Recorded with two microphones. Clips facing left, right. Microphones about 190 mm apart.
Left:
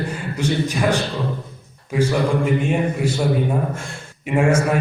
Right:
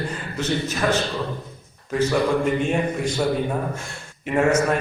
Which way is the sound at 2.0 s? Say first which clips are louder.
Left 1 dB; 5° left (ahead or behind).